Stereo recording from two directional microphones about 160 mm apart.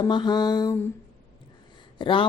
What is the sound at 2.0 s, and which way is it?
Speech, 30° left (ahead or behind).